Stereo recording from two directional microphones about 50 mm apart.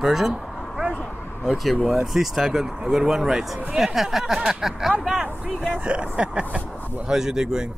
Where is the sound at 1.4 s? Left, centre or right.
Centre.